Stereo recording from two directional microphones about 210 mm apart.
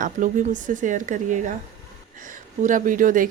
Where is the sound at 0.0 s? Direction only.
35° right (ahead or behind).